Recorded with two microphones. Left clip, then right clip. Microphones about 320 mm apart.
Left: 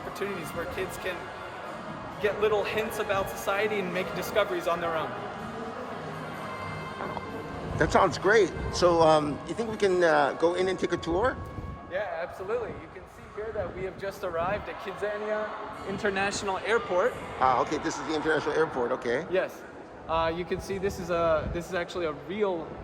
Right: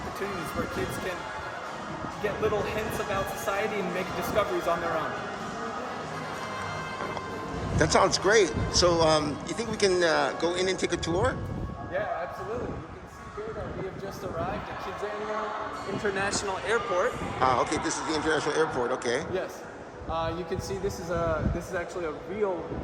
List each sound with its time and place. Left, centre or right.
2.4 s a man's voice: centre
7.8 s a man's voice: centre
16.0 s speech: left
17.4 s a man's voice: centre
20.1 s speech: left